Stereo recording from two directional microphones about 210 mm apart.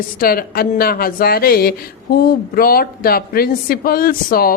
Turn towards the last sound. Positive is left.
turn(degrees=45)  # may be behind; listen again after turning